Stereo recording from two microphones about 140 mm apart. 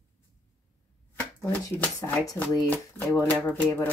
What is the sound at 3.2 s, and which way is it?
Speech, 10° left (ahead or behind).